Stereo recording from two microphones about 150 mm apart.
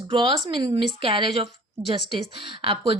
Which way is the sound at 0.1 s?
30° right (ahead or behind).